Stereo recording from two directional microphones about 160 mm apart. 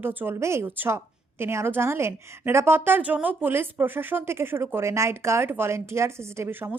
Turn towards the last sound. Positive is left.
turn(degrees=-15)  # may be behind; listen again after turning